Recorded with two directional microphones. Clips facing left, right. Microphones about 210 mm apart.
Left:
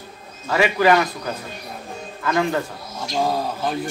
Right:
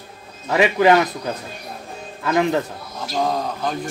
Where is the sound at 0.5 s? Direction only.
20° right (ahead or behind).